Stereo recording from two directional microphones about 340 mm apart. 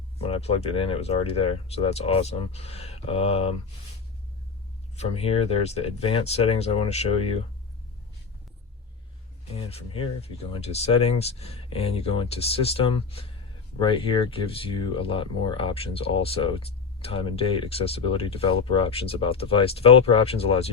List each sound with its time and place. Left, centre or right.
0.2 s speech: centre
4.9 s speech: centre
9.5 s speech: centre